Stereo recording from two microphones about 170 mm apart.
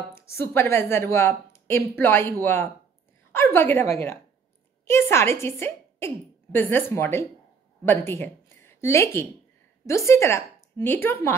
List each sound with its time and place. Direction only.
0.1 s a woman's voice: 15° left (ahead or behind)